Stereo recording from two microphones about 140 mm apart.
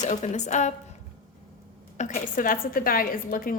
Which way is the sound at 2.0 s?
75° left (ahead or behind).